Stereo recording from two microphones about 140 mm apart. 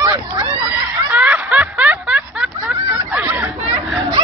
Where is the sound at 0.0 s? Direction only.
25° right (ahead or behind).